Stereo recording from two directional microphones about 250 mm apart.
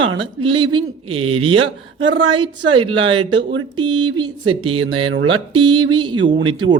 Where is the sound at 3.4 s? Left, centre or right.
Right.